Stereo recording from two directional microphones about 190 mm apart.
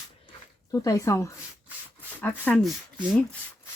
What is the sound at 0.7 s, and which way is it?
Speech, 15° left (ahead or behind).